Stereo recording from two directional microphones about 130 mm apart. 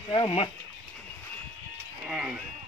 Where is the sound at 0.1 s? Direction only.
40° left (ahead or behind).